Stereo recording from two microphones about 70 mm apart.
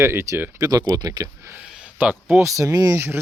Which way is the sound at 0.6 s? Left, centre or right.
Right.